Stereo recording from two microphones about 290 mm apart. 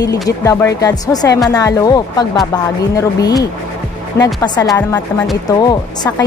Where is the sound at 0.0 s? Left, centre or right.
Centre.